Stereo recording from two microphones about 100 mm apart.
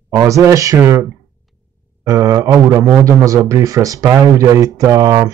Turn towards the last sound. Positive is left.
turn(degrees=-35)  # may be behind; listen again after turning